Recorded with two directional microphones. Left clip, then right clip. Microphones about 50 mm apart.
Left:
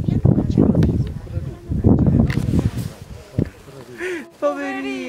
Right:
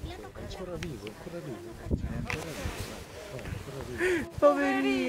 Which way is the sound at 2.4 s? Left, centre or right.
Centre.